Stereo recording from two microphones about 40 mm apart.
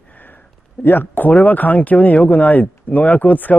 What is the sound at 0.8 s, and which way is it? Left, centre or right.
A man's voice, left.